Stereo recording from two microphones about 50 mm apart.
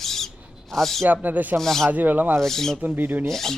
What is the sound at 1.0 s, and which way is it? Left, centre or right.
Speech, right.